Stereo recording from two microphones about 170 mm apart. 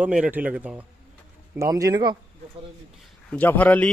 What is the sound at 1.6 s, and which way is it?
Speech, 20° right (ahead or behind).